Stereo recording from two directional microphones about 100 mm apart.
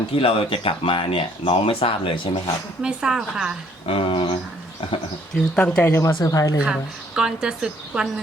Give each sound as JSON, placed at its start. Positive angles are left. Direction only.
{"t": 0.2, "sound": "speech", "side_deg": 65}
{"t": 2.8, "sound": "speech", "side_deg": -10}
{"t": 3.8, "sound": "speech", "side_deg": 65}
{"t": 5.3, "sound": "speech", "side_deg": 10}
{"t": 5.9, "sound": "a woman's voice", "side_deg": 30}
{"t": 7.2, "sound": "speech", "side_deg": -10}